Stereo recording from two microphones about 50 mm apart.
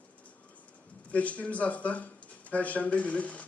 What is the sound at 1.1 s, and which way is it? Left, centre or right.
A man's voice, left.